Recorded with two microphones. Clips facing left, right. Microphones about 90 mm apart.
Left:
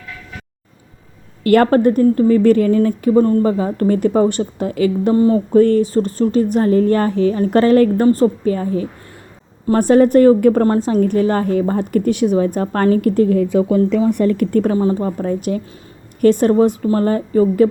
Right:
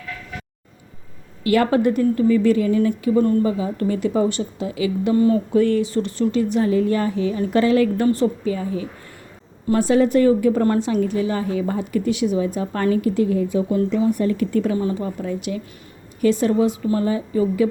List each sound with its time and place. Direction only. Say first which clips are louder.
1.5 s speech: left 5 dB; 50° left (ahead or behind)
5.1 s a sound: left 2 dB; 30° left (ahead or behind)
5.5 s speech: left 6 dB; 45° left (ahead or behind)
10.7 s speech: left 4 dB; 35° left (ahead or behind); by 13.7 s 70° left (ahead or behind)
14.2 s speech: left 5 dB; 50° left (ahead or behind)
14.8 s speech: left 6 dB; 35° left (ahead or behind)